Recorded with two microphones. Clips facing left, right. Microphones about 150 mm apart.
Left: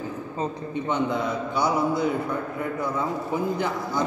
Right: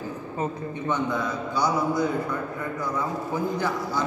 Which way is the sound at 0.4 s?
20° left (ahead or behind).